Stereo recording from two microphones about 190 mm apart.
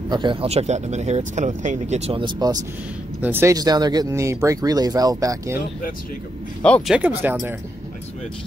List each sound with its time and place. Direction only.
0.1 s speech: 25° right (ahead or behind)
6.6 s speech: 5° left (ahead or behind)
7.0 s speech: 10° right (ahead or behind)